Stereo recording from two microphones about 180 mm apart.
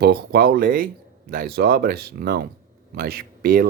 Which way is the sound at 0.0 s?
60° right (ahead or behind).